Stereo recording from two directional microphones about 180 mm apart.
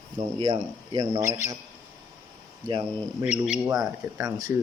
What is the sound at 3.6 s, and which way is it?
Speech, 20° right (ahead or behind).